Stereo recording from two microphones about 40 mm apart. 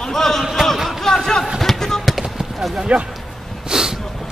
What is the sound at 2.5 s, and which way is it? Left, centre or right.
Speech, centre.